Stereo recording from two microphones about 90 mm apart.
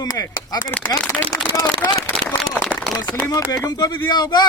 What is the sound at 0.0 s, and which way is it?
Speech, 50° left (ahead or behind).